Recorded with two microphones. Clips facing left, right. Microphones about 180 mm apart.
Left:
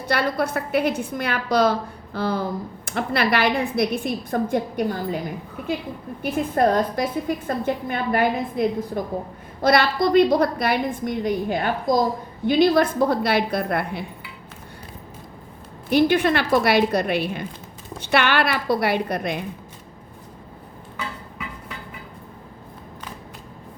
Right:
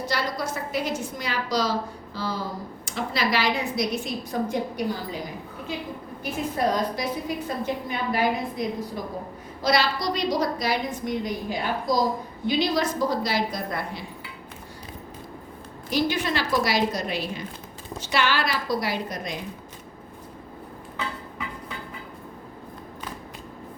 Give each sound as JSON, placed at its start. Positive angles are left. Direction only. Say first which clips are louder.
{"t": 0.0, "sound": "a woman's voice", "louder": "left 5 dB", "side_deg": 60}
{"t": 6.3, "sound": "a woman's voice", "louder": "left 5 dB", "side_deg": 55}
{"t": 15.9, "sound": "a woman's voice", "louder": "left 7 dB", "side_deg": 60}